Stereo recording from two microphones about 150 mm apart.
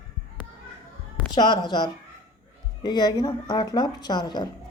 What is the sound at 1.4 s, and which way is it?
Speech, 30° left (ahead or behind).